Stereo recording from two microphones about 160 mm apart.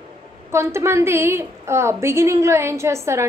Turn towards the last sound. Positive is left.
turn(degrees=-15)  # may be behind; listen again after turning